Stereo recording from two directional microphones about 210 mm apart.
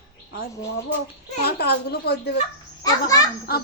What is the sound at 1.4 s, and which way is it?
A woman's voice, 50° left (ahead or behind).